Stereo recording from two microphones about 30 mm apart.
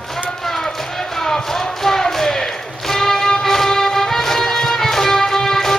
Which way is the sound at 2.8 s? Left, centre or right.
Centre.